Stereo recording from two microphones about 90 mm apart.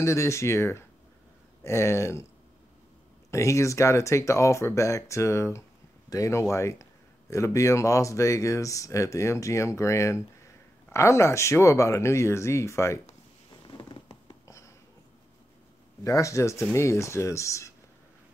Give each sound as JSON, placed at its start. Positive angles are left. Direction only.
{"t": 0.0, "sound": "speech", "side_deg": 35}
{"t": 3.3, "sound": "speech", "side_deg": 35}
{"t": 13.7, "sound": "fireworks", "side_deg": 55}
{"t": 16.0, "sound": "speech", "side_deg": 35}